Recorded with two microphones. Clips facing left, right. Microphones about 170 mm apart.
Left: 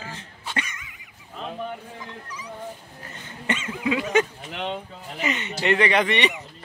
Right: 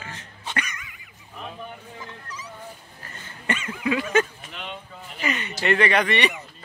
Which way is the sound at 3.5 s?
20° left (ahead or behind).